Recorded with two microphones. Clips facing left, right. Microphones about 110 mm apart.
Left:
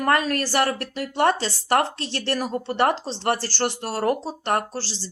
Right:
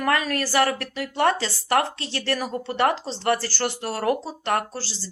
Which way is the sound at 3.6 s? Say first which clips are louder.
Left 3 dB; 40° left (ahead or behind).